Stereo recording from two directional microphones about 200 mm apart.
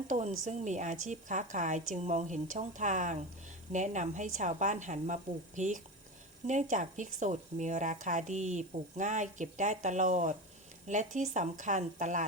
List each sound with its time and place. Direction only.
0.1 s speech: 40° right (ahead or behind)